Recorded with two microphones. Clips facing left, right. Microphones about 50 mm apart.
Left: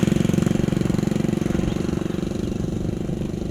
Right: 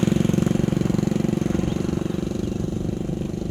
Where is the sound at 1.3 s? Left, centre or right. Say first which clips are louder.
Even; centre.